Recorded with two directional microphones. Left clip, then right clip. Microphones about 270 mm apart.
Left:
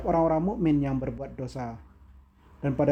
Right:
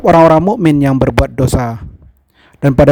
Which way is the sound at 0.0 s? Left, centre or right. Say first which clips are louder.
Right 18 dB; right.